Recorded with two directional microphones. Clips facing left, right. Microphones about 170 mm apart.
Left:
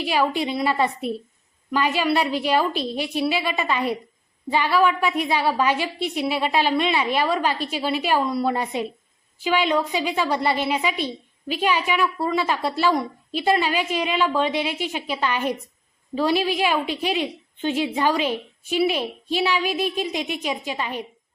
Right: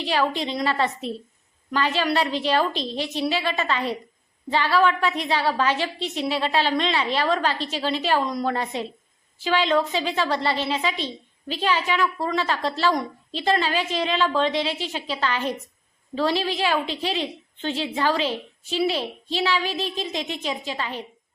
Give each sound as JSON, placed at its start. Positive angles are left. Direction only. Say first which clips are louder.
{"t": 0.0, "sound": "a woman's voice", "louder": "left 2 dB", "side_deg": 10}